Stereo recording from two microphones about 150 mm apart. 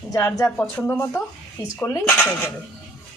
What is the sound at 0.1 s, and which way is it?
A woman's voice, 20° left (ahead or behind).